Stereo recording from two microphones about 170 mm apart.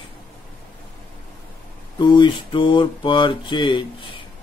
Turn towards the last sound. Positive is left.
turn(degrees=30)  # may be behind; listen again after turning